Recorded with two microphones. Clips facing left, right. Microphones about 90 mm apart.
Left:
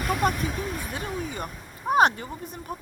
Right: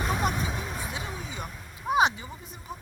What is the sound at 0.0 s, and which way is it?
Vehicle, 20° right (ahead or behind).